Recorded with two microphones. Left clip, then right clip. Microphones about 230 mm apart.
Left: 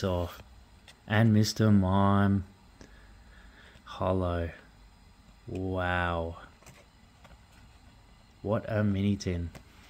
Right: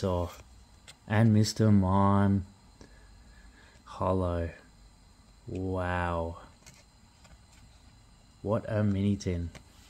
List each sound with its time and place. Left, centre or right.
0.0 s speech: centre
3.8 s speech: centre
5.6 s speech: centre
8.5 s speech: centre